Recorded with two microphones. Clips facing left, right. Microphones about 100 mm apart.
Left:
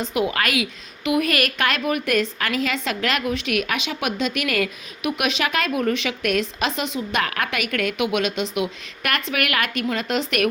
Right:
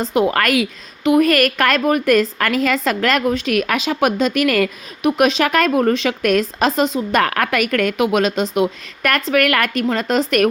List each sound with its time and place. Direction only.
0.0 s a woman's voice: 35° right (ahead or behind)
5.0 s a woman's voice: 35° right (ahead or behind)
7.2 s a woman's voice: 50° right (ahead or behind)